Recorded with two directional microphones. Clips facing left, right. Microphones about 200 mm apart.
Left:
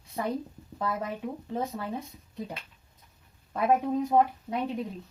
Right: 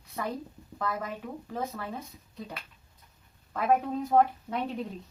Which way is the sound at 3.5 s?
20° left (ahead or behind).